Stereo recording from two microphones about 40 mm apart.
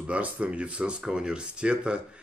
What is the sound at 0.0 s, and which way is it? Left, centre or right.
Speech, right.